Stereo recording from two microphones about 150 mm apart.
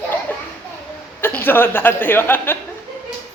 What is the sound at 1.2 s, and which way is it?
A woman's voice, 15° left (ahead or behind).